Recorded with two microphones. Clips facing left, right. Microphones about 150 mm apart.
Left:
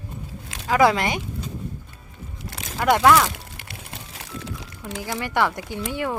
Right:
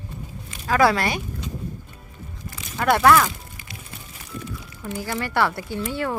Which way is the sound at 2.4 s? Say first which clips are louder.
Left 3 dB; 90° left.